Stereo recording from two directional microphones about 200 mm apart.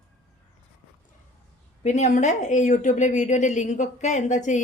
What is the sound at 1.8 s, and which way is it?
A woman's voice, 35° left (ahead or behind).